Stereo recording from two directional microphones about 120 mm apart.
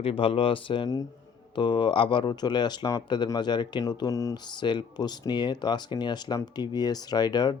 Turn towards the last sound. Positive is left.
turn(degrees=35)  # may be behind; listen again after turning